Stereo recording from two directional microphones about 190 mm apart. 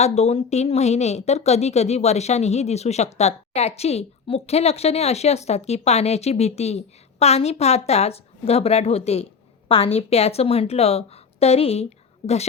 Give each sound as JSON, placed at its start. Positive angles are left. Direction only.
{"t": 0.0, "sound": "a woman's voice", "side_deg": 35}